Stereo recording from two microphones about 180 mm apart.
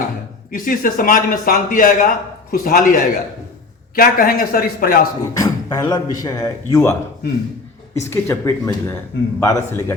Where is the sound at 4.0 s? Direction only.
55° left (ahead or behind).